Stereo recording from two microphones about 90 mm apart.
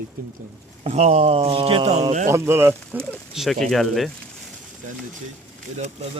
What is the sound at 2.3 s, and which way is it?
Speech, 30° right (ahead or behind).